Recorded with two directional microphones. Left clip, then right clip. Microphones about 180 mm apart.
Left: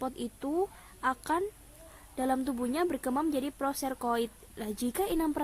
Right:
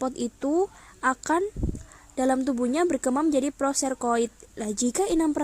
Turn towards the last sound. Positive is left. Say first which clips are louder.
# right 6 dB
turn(degrees=-30)  # may be behind; listen again after turning